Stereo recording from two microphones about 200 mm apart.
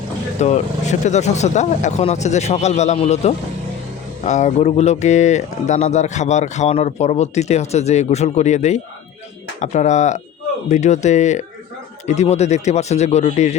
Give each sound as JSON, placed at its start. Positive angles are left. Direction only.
{"t": 0.3, "sound": "speech", "side_deg": 35}